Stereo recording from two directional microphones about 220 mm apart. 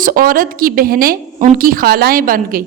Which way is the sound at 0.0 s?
40° right (ahead or behind).